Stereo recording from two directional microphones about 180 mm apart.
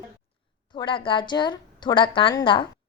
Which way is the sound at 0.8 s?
25° left (ahead or behind).